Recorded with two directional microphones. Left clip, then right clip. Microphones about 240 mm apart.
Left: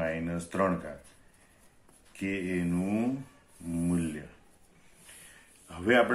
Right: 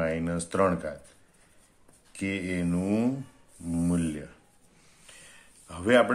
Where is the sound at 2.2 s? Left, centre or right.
Right.